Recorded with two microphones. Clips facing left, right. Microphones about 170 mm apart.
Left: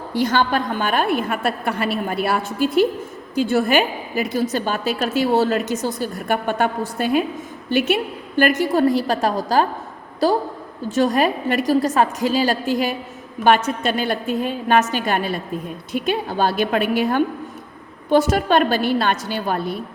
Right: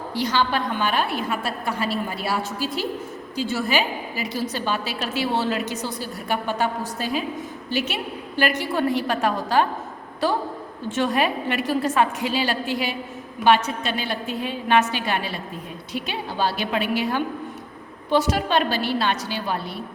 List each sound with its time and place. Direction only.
0.1 s a woman's voice: 50° left (ahead or behind)